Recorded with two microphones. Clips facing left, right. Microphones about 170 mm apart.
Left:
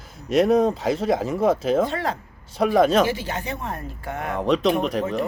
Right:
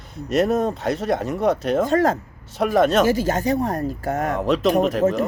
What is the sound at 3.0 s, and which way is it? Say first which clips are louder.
Speech: right 6 dB; 40° right (ahead or behind).